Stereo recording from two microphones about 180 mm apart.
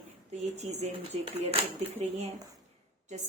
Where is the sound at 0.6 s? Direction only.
40° right (ahead or behind).